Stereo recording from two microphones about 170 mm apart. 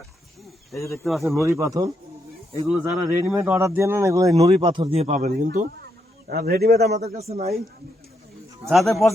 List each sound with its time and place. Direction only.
0.8 s speech: 15° left (ahead or behind)
1.0 s a man's voice: centre (ahead or behind)
1.5 s speech: 20° right (ahead or behind); by 5.6 s 50° right (ahead or behind)
6.2 s a man's voice: 70° right (ahead or behind)
7.0 s speech: 40° right (ahead or behind)
8.7 s a man's voice: centre (ahead or behind)